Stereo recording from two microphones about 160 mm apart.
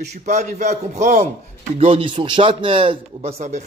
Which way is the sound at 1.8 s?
35° right (ahead or behind).